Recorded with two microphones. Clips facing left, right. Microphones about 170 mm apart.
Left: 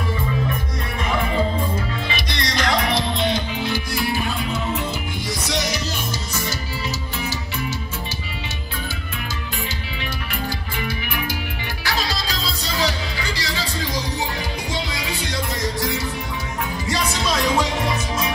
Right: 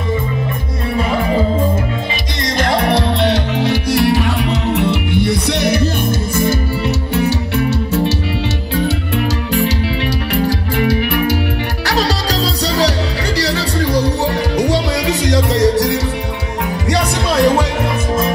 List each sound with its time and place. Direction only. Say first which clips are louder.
2.4 s music: right 7 dB; 50° right (ahead or behind)
7.2 s music: right 14 dB; 65° right (ahead or behind)
10.3 s music: right 13 dB; 75° right (ahead or behind)